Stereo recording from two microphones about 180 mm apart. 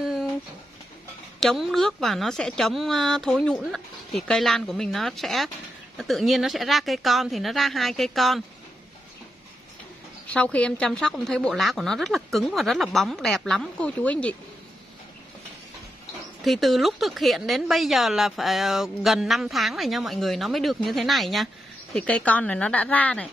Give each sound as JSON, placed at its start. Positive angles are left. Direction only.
{"t": 0.0, "sound": "a sound", "side_deg": 0}
{"t": 1.4, "sound": "speech", "side_deg": 0}
{"t": 10.2, "sound": "speech", "side_deg": 5}
{"t": 16.4, "sound": "speech", "side_deg": 0}